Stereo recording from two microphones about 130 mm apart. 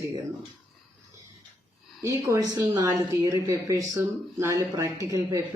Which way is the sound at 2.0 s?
25° right (ahead or behind).